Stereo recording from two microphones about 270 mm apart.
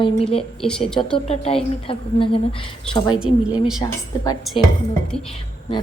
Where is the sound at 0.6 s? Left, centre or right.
Centre.